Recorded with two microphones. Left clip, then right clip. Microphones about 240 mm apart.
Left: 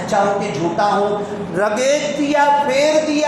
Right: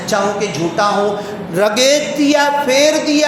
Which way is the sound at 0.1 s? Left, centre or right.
Right.